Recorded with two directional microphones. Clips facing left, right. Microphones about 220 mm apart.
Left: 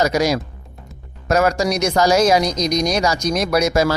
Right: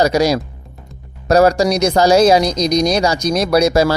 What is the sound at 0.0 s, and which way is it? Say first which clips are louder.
Speech: right 4 dB; 35° right (ahead or behind).